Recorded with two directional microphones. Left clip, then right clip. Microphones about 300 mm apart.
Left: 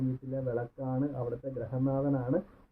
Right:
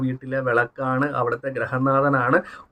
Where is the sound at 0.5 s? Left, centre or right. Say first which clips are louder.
Right 14 dB; centre.